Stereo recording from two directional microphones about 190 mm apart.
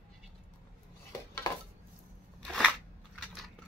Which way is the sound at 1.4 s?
20° left (ahead or behind).